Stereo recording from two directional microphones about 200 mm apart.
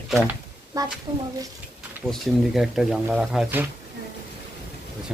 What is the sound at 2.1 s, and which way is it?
Speech, centre (ahead or behind).